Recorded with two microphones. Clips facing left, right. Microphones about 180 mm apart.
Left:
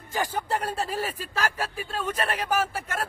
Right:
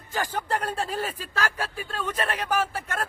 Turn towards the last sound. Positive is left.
turn(degrees=10)  # may be behind; listen again after turning